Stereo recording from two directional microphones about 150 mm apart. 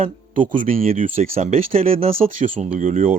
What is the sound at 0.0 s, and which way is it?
Speech, 60° right (ahead or behind).